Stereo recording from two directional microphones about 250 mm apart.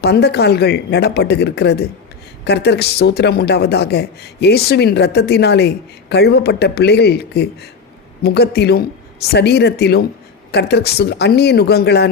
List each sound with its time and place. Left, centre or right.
0.0 s speech: left